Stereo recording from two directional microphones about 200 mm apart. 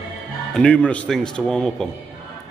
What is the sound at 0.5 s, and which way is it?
A man's voice, 5° left (ahead or behind).